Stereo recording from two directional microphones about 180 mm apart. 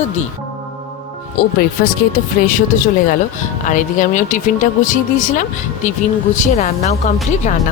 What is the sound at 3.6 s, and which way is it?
Speech, 45° left (ahead or behind).